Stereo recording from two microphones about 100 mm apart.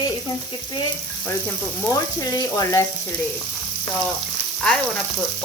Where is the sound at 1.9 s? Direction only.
40° left (ahead or behind).